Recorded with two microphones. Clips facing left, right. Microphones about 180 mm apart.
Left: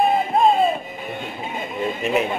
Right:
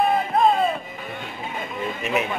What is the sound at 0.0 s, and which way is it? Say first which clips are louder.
Music: left 2 dB; 25° left (ahead or behind).